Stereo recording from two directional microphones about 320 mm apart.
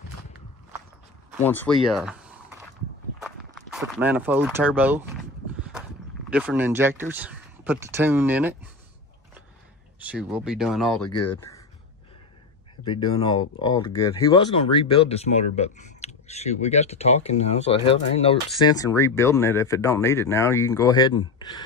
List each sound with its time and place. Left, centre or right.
1.4 s speech: centre
3.7 s speech: centre
6.3 s speech: centre
9.9 s speech: centre
12.8 s speech: centre